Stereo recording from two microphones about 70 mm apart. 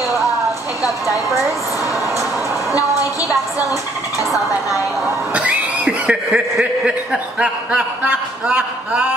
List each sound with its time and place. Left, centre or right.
5.3 s speech: centre